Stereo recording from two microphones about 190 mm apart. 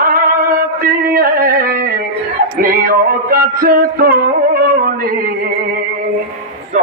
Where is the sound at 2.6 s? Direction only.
50° right (ahead or behind).